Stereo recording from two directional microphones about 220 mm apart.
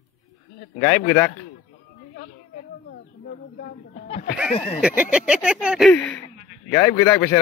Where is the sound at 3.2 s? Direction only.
45° left (ahead or behind).